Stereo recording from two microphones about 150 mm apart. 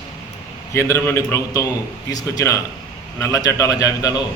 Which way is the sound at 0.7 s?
20° left (ahead or behind).